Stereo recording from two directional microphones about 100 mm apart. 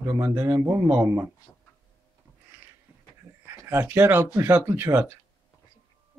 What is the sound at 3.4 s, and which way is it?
A man's voice, 25° right (ahead or behind).